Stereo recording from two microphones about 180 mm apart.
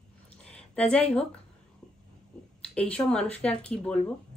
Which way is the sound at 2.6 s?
5° left (ahead or behind).